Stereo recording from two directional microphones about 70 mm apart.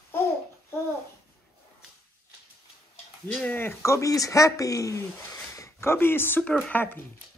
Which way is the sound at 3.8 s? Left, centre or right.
Left.